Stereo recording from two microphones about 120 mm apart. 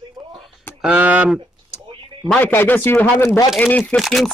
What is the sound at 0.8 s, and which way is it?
Speech, 10° right (ahead or behind).